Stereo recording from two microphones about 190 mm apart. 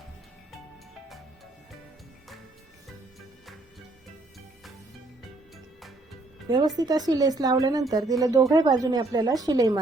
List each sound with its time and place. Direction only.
6.7 s speech: 20° right (ahead or behind)